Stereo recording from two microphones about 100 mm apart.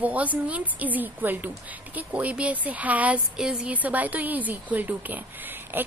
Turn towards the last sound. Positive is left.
turn(degrees=-20)  # may be behind; listen again after turning